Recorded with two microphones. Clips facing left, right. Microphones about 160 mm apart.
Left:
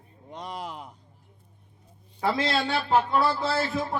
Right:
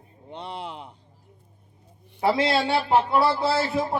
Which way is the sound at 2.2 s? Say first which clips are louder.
Right 4 dB; 25° right (ahead or behind).